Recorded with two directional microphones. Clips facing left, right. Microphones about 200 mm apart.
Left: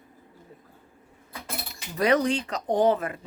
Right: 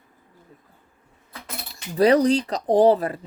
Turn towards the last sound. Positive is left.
turn(degrees=-35)  # may be behind; listen again after turning